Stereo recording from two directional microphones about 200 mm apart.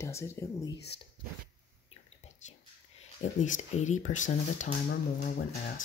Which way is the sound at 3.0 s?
35° left (ahead or behind).